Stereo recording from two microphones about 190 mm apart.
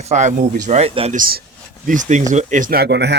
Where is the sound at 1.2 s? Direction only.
50° right (ahead or behind).